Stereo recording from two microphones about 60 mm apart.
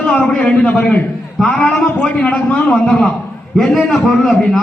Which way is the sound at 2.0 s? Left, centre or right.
Left.